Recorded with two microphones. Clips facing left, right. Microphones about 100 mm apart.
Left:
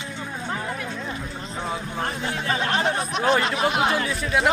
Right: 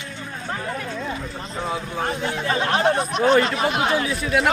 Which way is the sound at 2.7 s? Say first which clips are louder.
Right 4 dB; centre (ahead or behind).